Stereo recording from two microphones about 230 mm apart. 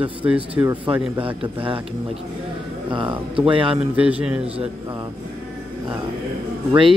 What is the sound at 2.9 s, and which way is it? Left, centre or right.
Speech, right.